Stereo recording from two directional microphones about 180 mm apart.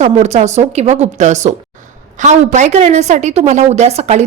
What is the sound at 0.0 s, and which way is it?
A woman's voice, 40° right (ahead or behind).